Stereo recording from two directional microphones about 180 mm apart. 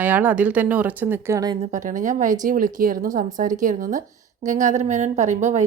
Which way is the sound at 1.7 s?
45° right (ahead or behind).